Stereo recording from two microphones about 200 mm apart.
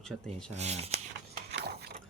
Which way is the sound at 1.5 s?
55° right (ahead or behind).